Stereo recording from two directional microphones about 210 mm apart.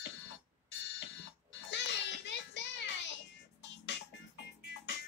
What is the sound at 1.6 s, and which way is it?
Children playing, 55° left (ahead or behind).